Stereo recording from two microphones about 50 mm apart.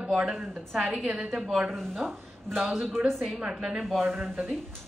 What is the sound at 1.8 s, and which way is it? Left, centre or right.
Speech, centre.